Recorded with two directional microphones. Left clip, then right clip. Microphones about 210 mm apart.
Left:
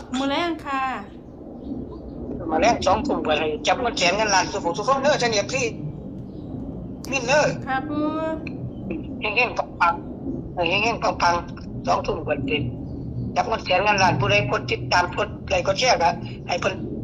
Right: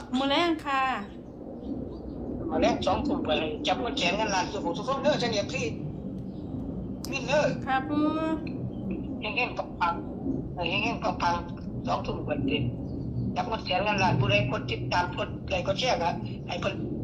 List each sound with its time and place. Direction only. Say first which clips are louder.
0.2 s a woman's voice: left 1 dB; centre (ahead or behind)
2.5 s a man's voice: left 7 dB; 50° left (ahead or behind)
7.1 s a man's voice: left 7 dB; 50° left (ahead or behind)
7.7 s speech: left 2 dB; centre (ahead or behind)
8.4 s a sound: left 4 dB; 50° left (ahead or behind)
10.6 s a man's voice: left 8 dB; 50° left (ahead or behind)